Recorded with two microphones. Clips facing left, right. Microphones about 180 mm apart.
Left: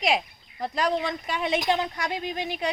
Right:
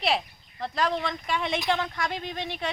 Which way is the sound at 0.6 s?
15° left (ahead or behind).